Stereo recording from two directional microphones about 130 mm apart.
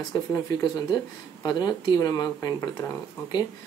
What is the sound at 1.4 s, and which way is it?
Speech, 30° left (ahead or behind).